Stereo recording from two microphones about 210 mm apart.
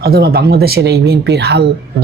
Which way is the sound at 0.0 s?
50° right (ahead or behind).